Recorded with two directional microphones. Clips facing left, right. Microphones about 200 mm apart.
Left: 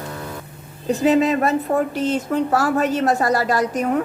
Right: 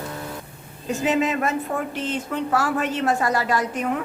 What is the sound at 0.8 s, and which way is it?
A woman's voice, 35° left (ahead or behind).